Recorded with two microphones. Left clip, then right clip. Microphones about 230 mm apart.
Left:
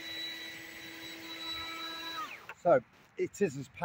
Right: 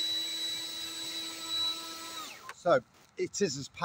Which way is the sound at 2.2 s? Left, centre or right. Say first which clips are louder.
Left 1 dB; centre.